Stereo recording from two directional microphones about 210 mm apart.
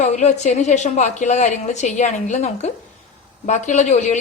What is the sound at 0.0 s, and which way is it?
A woman's voice, 35° left (ahead or behind).